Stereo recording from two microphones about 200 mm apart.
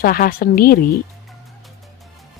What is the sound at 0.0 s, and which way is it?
Speech, 45° left (ahead or behind).